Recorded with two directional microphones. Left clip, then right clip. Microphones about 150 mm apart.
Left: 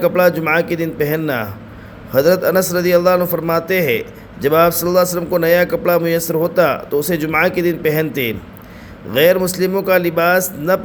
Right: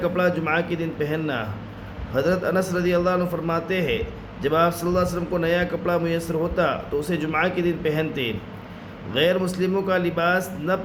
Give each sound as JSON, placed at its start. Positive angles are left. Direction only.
{"t": 0.0, "sound": "a man's voice", "side_deg": 40}